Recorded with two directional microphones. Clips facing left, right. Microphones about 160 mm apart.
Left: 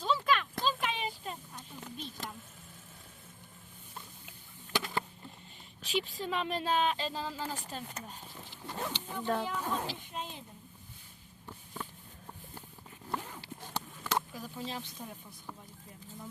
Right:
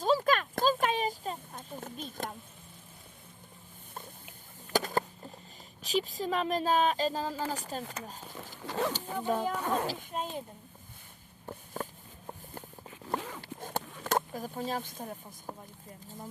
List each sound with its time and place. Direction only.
0.0 s a sound: 45° right (ahead or behind)
3.9 s patter: 50° right (ahead or behind)
5.8 s speech: 40° right (ahead or behind)
8.5 s zipper: 90° right
8.9 s speech: 40° right (ahead or behind)
9.6 s speech: 65° right (ahead or behind)
9.8 s speech: 45° right (ahead or behind)
11.4 s a sound: 45° right (ahead or behind)
13.1 s a sound: 90° right
13.4 s clip-clop: 50° right (ahead or behind)
16.0 s speech: 45° right (ahead or behind)